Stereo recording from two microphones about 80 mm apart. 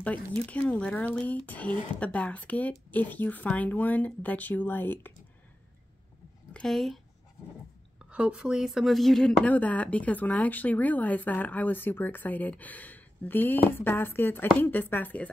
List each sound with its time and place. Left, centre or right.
0.5 s speech: centre
6.5 s a woman's voice: centre
8.0 s a woman's voice: centre
9.4 s speech: centre